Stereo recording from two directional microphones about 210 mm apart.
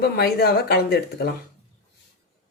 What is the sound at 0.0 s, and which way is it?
Speech, 50° left (ahead or behind).